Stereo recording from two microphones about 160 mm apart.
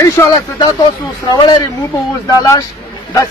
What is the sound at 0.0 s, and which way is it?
Speech, 20° left (ahead or behind).